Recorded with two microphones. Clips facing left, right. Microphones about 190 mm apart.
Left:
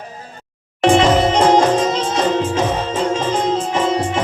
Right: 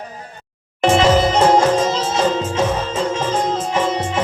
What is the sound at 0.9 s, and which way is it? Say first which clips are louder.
Music: left 1 dB; 30° left (ahead or behind).